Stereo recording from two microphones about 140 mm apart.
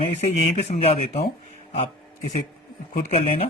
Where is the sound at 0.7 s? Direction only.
50° left (ahead or behind).